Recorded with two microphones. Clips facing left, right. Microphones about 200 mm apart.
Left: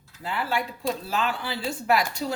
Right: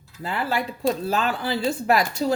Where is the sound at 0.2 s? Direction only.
40° right (ahead or behind).